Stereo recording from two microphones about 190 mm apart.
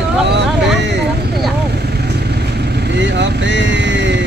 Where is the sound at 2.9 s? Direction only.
65° right (ahead or behind).